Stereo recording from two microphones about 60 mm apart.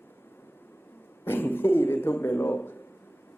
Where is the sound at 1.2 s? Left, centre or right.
Left.